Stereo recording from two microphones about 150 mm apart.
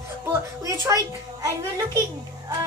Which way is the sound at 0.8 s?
25° right (ahead or behind).